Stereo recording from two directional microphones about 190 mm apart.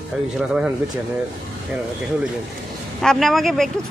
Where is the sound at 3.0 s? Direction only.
Centre (ahead or behind).